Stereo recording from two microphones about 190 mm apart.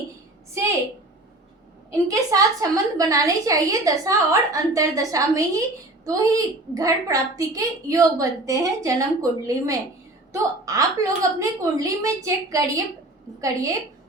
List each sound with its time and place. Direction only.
1.9 s a woman's voice: 20° right (ahead or behind)